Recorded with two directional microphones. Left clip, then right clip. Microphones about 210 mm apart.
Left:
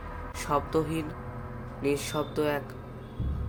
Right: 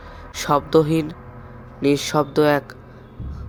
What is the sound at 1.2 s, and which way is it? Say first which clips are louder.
Music: even; centre (ahead or behind).